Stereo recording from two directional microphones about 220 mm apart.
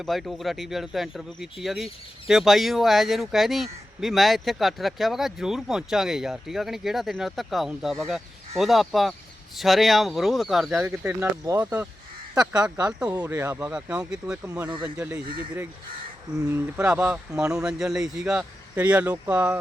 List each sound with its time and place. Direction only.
0.0 s speech: centre (ahead or behind)
14.4 s speech: 15° right (ahead or behind)
16.4 s speech: 10° right (ahead or behind)